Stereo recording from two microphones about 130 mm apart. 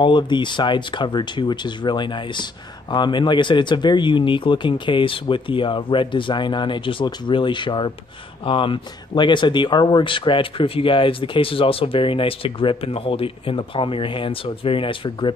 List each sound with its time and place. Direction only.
0.0 s speech: 35° left (ahead or behind)